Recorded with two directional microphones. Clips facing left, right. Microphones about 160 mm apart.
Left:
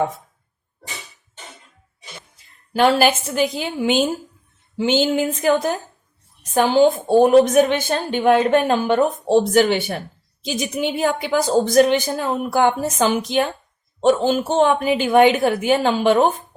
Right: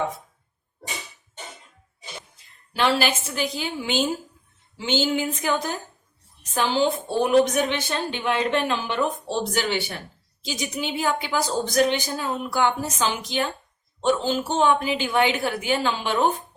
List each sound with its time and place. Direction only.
2.7 s a woman's voice: 50° left (ahead or behind)
4.8 s a woman's voice: 50° left (ahead or behind)